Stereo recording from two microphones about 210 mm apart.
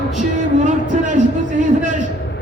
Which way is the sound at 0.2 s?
35° right (ahead or behind).